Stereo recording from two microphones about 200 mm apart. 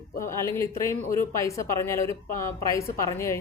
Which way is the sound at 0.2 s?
15° left (ahead or behind).